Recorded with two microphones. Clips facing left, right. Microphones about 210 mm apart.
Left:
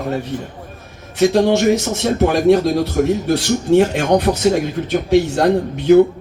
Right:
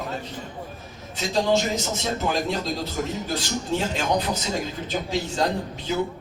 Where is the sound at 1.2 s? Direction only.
70° left (ahead or behind).